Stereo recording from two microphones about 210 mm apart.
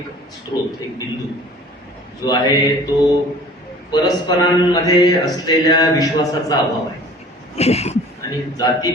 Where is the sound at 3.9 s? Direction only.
20° left (ahead or behind).